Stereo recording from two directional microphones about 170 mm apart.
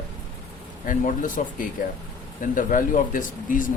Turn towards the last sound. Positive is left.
turn(degrees=50)  # may be behind; listen again after turning